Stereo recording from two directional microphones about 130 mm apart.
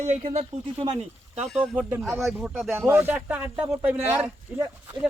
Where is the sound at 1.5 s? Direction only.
Centre (ahead or behind).